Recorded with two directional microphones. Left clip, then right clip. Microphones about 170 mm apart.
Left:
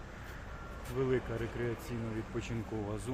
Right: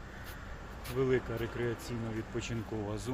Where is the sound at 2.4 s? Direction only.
25° right (ahead or behind).